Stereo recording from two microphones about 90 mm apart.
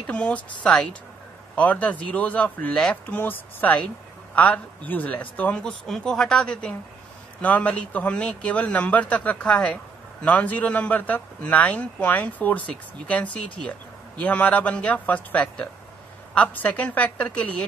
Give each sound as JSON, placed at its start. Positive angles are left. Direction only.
{"t": 0.0, "sound": "a man's voice", "side_deg": 15}
{"t": 1.5, "sound": "a man's voice", "side_deg": 15}
{"t": 3.1, "sound": "a woman's voice", "side_deg": 20}